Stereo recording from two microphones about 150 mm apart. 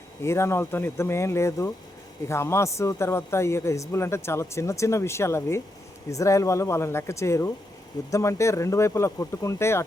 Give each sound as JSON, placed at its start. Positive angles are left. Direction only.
{"t": 0.2, "sound": "speech", "side_deg": 20}